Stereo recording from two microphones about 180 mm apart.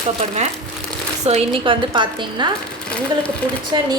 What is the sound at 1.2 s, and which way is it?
A woman's voice, 35° right (ahead or behind).